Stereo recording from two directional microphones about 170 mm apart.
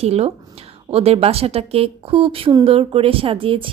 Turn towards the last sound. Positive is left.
turn(degrees=-35)  # may be behind; listen again after turning